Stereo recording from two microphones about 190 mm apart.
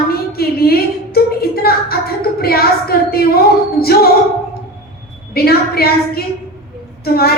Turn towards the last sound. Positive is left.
turn(degrees=55)  # may be behind; listen again after turning